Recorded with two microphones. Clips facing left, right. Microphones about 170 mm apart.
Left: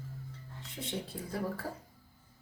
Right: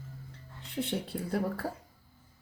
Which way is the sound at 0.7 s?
65° right (ahead or behind).